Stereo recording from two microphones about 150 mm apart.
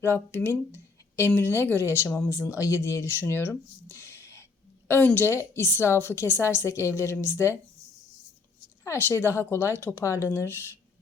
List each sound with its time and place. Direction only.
0.0 s speech: 15° left (ahead or behind)
8.8 s speech: 15° left (ahead or behind)